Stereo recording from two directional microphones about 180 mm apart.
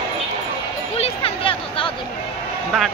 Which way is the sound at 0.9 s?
35° left (ahead or behind).